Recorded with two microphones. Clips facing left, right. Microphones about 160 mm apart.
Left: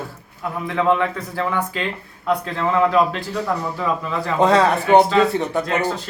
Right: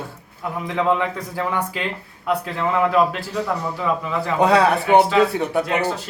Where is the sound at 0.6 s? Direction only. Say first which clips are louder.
Left 2 dB; 15° right (ahead or behind).